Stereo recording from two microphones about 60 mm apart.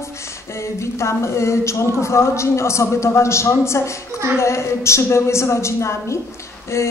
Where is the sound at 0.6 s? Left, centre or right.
Left.